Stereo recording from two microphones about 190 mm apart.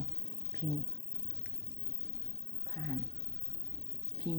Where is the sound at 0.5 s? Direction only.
20° left (ahead or behind).